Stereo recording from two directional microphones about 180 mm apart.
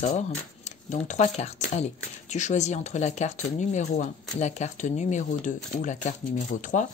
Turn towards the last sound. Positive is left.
turn(degrees=40)  # may be behind; listen again after turning